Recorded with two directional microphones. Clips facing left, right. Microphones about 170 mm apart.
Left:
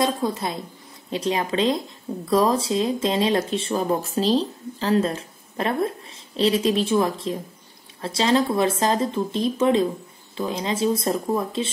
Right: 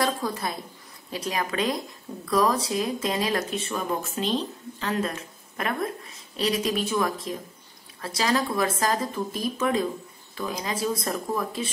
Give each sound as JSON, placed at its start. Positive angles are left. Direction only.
{"t": 0.0, "sound": "speech", "side_deg": 25}